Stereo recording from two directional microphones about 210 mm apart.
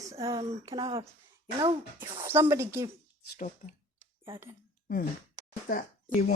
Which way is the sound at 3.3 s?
40° left (ahead or behind).